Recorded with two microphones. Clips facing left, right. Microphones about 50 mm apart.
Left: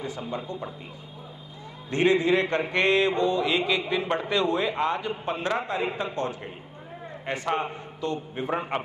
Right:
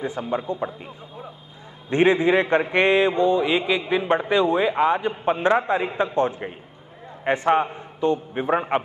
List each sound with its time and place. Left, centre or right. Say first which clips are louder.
0.0 s mantra: right 6 dB; right
1.9 s mantra: right 4 dB; right
7.7 s a man's voice: right 8 dB; right